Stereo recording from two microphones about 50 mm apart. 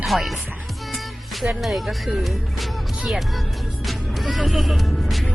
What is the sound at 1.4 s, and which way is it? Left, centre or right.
Speech, centre.